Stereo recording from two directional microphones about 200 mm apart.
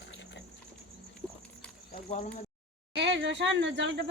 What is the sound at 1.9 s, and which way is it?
Speech, 30° left (ahead or behind).